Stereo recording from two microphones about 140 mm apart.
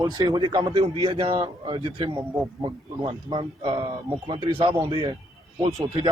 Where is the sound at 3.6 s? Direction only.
45° right (ahead or behind).